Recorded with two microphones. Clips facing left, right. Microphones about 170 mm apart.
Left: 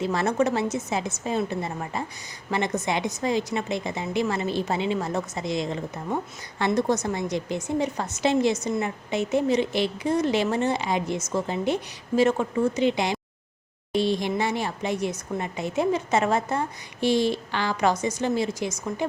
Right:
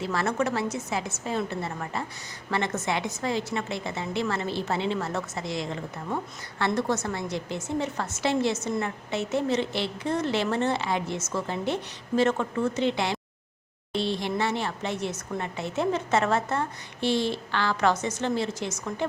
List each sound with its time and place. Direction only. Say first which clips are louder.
0.0 s a woman's voice: left 4 dB; 20° left (ahead or behind)
6.7 s speech: left 3 dB; 15° left (ahead or behind)